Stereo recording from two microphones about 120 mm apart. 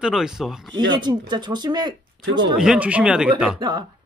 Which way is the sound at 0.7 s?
40° right (ahead or behind).